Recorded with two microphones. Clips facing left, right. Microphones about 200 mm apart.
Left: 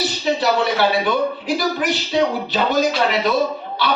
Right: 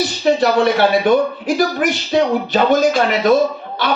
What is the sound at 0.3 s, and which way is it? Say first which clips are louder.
A man's voice: right 3 dB; 45° right (ahead or behind).